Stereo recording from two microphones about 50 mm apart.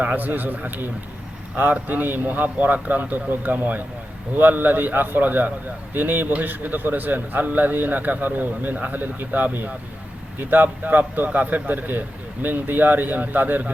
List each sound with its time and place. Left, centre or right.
0.0 s a man's voice: right